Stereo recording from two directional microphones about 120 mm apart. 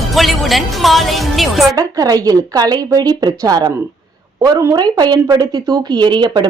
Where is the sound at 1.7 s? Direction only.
30° right (ahead or behind).